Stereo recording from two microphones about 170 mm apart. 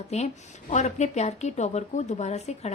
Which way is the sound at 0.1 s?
40° left (ahead or behind).